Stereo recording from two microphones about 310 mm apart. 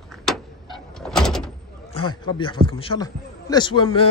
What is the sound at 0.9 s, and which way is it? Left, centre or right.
Door, centre.